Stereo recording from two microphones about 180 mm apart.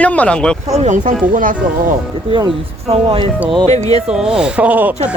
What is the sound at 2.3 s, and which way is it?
Speech, 25° right (ahead or behind).